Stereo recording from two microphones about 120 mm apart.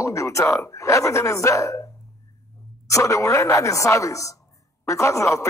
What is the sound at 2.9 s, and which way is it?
Speech, 25° left (ahead or behind).